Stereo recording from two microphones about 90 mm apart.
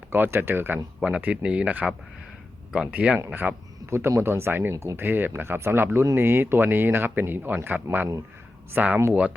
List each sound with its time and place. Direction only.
0.1 s speech: 25° right (ahead or behind)
0.9 s speech: 10° right (ahead or behind)
3.8 s speech: 30° right (ahead or behind)